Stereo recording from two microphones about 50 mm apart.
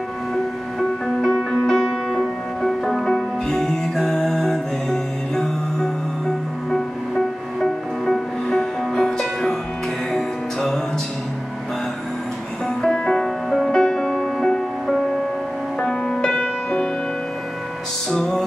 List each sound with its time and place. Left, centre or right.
0.7 s music: centre
7.6 s music: centre
12.6 s music: centre
18.1 s music: centre